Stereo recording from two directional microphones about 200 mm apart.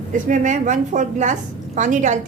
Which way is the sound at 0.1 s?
40° right (ahead or behind).